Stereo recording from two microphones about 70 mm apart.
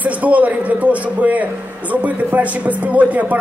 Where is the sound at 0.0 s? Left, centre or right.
Right.